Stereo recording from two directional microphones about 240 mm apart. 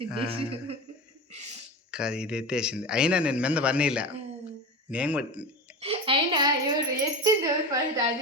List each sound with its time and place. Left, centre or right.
0.3 s a man's voice: right
1.9 s a man's voice: centre
5.8 s a sound: right